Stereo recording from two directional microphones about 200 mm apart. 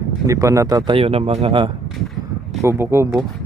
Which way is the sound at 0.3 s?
15° right (ahead or behind).